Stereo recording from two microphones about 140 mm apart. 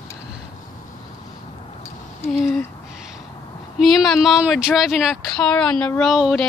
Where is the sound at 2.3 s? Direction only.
Centre (ahead or behind).